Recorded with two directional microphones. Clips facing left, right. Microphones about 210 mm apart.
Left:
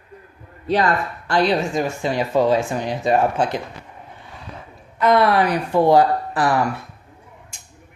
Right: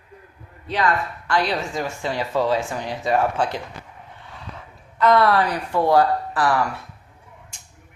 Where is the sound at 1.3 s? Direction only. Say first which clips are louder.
Left 5 dB; 20° left (ahead or behind).